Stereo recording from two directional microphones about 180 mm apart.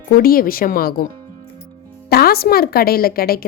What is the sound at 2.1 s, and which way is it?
A woman's voice, 60° left (ahead or behind).